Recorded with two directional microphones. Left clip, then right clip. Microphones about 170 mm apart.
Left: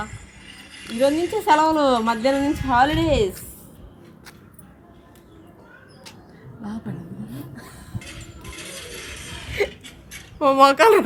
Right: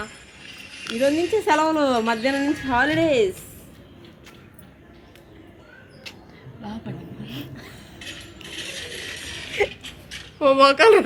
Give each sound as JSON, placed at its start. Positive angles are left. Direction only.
{"t": 0.9, "sound": "a woman's voice", "side_deg": 90}
{"t": 6.6, "sound": "chuckle", "side_deg": 90}
{"t": 9.6, "sound": "a sound", "side_deg": 75}
{"t": 10.3, "sound": "speech", "side_deg": 90}